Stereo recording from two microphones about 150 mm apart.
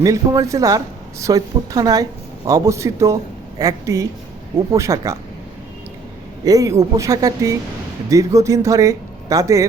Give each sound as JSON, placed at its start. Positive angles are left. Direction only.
{"t": 0.0, "sound": "speech", "side_deg": -20}
{"t": 6.4, "sound": "speech", "side_deg": -25}